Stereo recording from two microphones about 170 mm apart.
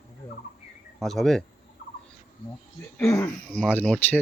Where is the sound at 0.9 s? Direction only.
Centre (ahead or behind).